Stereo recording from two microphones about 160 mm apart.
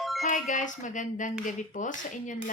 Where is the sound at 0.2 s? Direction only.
50° left (ahead or behind).